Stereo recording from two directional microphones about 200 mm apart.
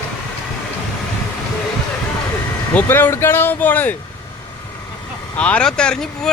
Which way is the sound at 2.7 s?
10° left (ahead or behind).